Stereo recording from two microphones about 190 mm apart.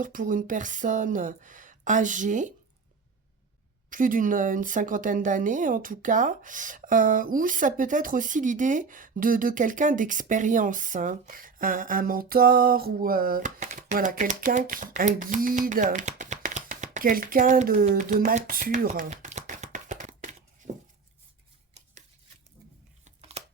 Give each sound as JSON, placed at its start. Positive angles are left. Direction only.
{"t": 0.0, "sound": "a woman's voice", "side_deg": -45}
{"t": 3.8, "sound": "a woman's voice", "side_deg": -45}
{"t": 17.8, "sound": "a sound", "side_deg": -40}
{"t": 23.0, "sound": "tearing", "side_deg": -35}